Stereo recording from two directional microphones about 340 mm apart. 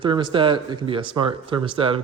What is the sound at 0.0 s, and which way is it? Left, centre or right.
Speech, centre.